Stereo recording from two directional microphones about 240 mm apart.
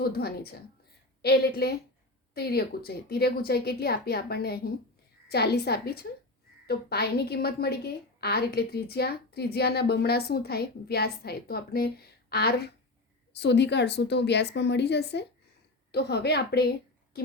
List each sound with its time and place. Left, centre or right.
0.0 s a woman's voice: left